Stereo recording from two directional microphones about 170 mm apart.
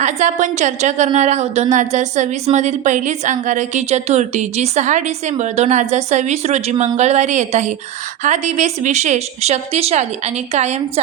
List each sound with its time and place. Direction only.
0.0 s a woman's voice: 45° right (ahead or behind)